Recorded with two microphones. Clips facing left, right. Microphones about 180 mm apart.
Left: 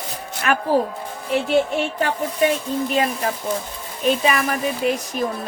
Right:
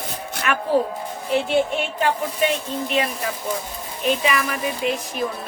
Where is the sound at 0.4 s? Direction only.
40° left (ahead or behind).